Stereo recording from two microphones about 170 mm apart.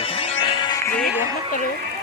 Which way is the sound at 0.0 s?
35° left (ahead or behind).